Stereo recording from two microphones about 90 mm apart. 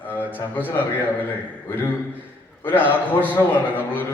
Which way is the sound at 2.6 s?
20° left (ahead or behind).